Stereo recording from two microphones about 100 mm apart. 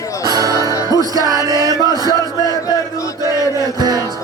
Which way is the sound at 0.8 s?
40° right (ahead or behind).